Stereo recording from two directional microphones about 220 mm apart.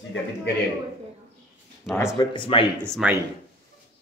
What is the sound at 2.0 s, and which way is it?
Speech, 15° left (ahead or behind).